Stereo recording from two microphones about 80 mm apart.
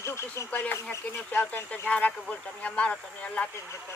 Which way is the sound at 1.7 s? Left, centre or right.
Centre.